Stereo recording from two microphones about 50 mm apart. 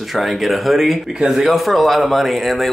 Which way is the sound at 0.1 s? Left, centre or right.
Centre.